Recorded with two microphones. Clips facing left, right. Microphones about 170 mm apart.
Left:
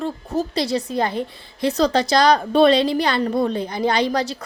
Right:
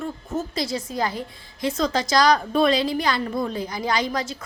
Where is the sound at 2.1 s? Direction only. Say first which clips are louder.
Even; 30° left (ahead or behind).